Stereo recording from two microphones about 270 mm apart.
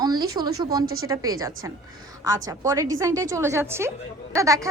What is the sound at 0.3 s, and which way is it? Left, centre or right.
A woman's voice, centre.